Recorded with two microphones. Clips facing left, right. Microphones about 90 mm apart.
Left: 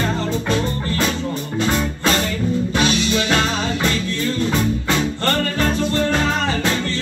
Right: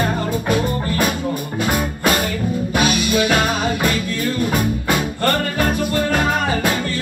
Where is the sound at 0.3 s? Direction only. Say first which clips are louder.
Right 2 dB; 15° right (ahead or behind).